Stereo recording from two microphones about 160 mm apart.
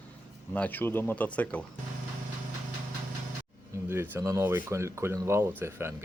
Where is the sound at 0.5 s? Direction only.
10° left (ahead or behind).